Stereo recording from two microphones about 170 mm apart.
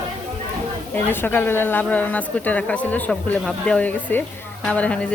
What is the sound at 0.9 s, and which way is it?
Speech, 10° left (ahead or behind).